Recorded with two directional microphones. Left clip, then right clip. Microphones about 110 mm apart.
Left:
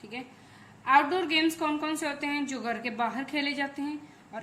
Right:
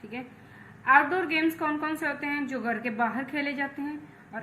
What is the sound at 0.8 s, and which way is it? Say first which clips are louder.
A woman's voice: right 2 dB; 40° left (ahead or behind).